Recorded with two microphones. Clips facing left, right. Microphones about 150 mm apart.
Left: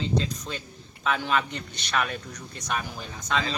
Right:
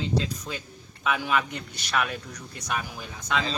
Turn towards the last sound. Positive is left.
turn(degrees=-5)  # may be behind; listen again after turning